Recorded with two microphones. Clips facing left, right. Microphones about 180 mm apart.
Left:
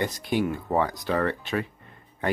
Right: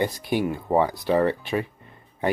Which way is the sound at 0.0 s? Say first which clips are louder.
Right 2 dB; 15° right (ahead or behind).